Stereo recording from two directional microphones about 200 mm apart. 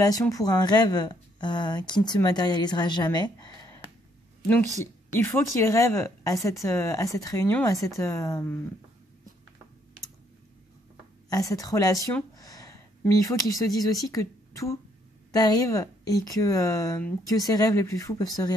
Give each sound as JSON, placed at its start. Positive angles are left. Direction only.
{"t": 0.0, "sound": "speech", "side_deg": 15}
{"t": 5.2, "sound": "speech", "side_deg": 15}
{"t": 11.2, "sound": "speech", "side_deg": 15}
{"t": 12.4, "sound": "a sound", "side_deg": 15}
{"t": 14.1, "sound": "speech", "side_deg": 15}